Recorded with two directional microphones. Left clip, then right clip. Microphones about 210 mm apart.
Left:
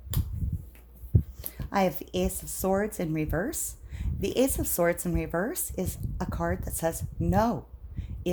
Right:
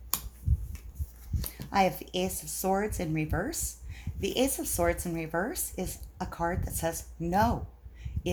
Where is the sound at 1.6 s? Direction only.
50° left (ahead or behind).